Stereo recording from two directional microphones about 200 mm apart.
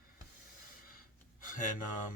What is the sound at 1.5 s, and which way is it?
Speech, 40° left (ahead or behind).